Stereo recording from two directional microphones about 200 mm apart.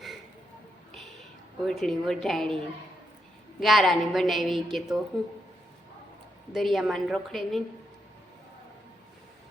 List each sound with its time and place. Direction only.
1.6 s a woman's voice: centre (ahead or behind)
6.5 s a woman's voice: centre (ahead or behind)